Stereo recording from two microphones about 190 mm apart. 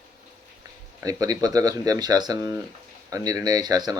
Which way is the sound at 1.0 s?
20° right (ahead or behind).